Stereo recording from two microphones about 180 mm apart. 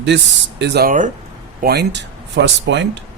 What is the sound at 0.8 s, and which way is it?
Speech, 45° right (ahead or behind).